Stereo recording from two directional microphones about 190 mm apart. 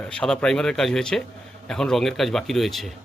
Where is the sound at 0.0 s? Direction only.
5° left (ahead or behind).